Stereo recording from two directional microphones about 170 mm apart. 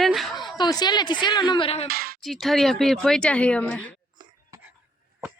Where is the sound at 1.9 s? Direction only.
60° right (ahead or behind).